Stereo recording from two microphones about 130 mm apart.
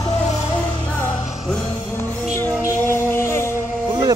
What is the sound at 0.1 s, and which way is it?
Music, 60° left (ahead or behind).